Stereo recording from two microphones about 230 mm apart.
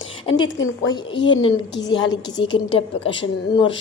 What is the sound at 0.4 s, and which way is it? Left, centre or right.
Speech, left.